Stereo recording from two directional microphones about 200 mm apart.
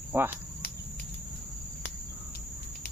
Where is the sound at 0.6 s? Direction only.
50° left (ahead or behind).